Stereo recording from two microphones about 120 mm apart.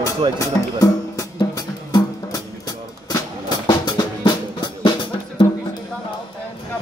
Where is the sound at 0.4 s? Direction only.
30° left (ahead or behind).